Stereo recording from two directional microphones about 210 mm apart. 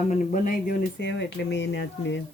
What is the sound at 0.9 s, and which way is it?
Speech, 55° left (ahead or behind).